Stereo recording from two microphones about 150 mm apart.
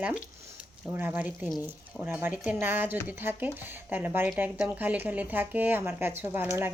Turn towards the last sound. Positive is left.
turn(degrees=-15)  # may be behind; listen again after turning